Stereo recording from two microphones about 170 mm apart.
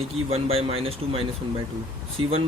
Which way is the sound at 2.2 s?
35° right (ahead or behind).